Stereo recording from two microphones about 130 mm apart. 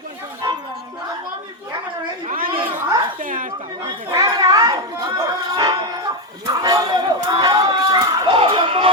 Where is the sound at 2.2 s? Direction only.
90° right.